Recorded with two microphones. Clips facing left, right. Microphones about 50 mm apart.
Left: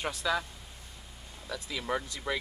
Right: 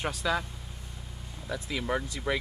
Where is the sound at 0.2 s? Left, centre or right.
Centre.